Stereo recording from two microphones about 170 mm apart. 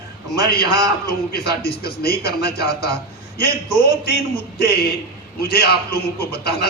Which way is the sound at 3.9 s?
75° left (ahead or behind).